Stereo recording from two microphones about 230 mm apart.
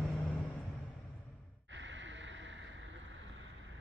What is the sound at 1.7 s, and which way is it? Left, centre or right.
Gasp, right.